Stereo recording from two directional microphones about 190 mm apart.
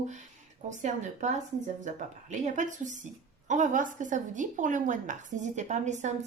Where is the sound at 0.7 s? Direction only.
40° right (ahead or behind).